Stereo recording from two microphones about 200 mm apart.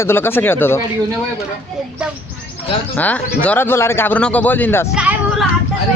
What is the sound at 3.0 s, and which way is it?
Speech, 10° left (ahead or behind).